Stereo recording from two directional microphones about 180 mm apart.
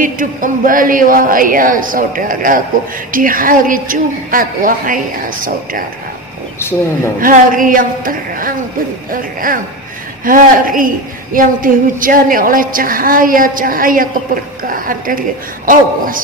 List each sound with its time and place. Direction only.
0.0 s a woman's voice: 50° right (ahead or behind)
7.2 s a woman's voice: 50° right (ahead or behind)